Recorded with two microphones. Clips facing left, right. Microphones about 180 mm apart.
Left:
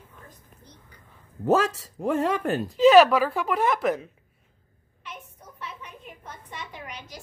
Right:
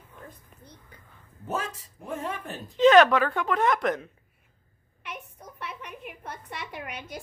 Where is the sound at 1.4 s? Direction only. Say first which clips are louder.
Left 11 dB; 85° left.